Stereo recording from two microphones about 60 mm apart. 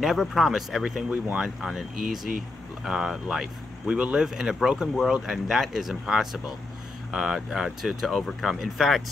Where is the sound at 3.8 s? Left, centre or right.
Centre.